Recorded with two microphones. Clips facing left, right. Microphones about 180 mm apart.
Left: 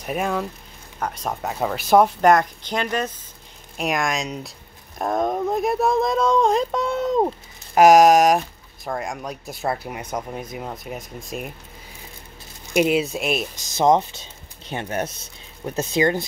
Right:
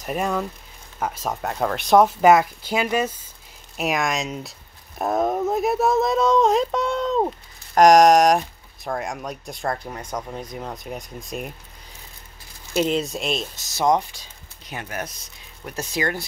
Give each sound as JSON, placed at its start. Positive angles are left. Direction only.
{"t": 0.0, "sound": "speech", "side_deg": 0}
{"t": 12.7, "sound": "speech", "side_deg": 10}
{"t": 13.6, "sound": "speech", "side_deg": 20}